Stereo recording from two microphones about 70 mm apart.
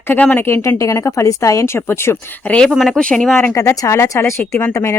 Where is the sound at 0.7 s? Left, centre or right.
Left.